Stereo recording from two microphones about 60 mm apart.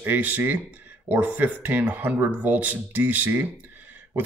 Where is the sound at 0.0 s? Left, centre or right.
Right.